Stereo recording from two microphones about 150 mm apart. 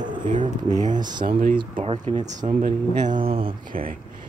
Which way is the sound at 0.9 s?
30° right (ahead or behind).